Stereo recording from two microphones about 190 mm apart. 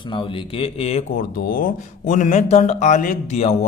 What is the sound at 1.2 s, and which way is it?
Speech, 45° left (ahead or behind).